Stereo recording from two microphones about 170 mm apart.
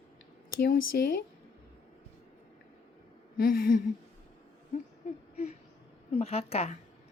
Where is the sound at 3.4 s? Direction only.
55° left (ahead or behind).